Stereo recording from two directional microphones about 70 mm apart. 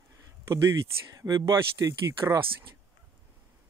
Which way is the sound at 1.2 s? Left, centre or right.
Right.